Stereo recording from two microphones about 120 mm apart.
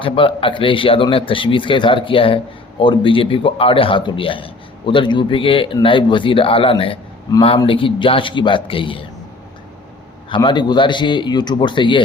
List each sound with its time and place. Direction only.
0.0 s a man's voice: 45° left (ahead or behind)
10.2 s a man's voice: 40° left (ahead or behind)